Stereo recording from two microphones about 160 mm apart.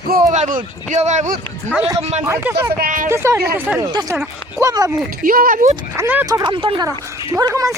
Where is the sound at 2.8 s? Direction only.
55° right (ahead or behind).